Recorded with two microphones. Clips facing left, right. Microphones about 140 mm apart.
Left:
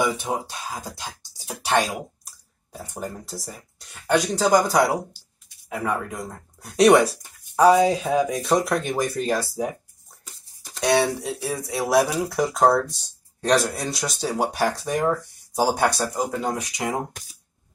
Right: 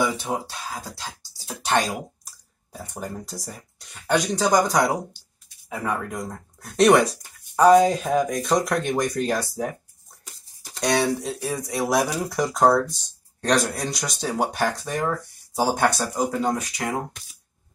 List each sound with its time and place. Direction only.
0.0 s speech: 15° left (ahead or behind)
1.5 s speech: 5° left (ahead or behind)
10.8 s speech: 5° left (ahead or behind)
16.5 s speech: 15° left (ahead or behind)